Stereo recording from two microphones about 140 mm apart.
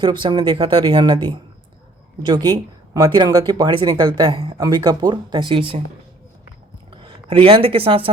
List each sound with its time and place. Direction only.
0.0 s speech: 35° right (ahead or behind)
6.9 s speech: 40° right (ahead or behind)